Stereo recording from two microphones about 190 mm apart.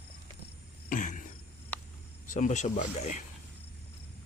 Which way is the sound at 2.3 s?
40° left (ahead or behind).